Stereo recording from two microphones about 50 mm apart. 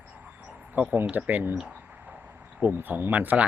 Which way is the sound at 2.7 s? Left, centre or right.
Right.